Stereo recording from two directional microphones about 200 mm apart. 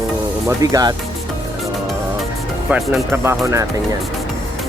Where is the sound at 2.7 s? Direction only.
10° right (ahead or behind).